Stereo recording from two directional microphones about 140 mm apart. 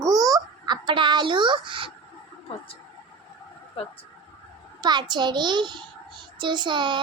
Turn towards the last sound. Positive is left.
turn(degrees=-35)  # may be behind; listen again after turning